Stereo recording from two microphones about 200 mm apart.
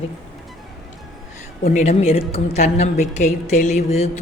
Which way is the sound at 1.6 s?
35° left (ahead or behind).